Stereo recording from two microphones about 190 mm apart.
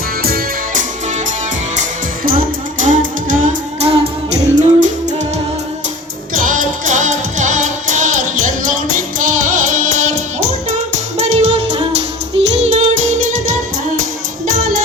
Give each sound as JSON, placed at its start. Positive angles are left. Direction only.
{"t": 0.2, "sound": "music", "side_deg": -50}
{"t": 3.8, "sound": "music", "side_deg": -30}
{"t": 6.3, "sound": "music", "side_deg": -45}
{"t": 14.0, "sound": "music", "side_deg": -45}